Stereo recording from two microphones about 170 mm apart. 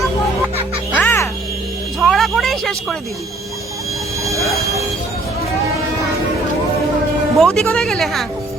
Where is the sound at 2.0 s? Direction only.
Centre (ahead or behind).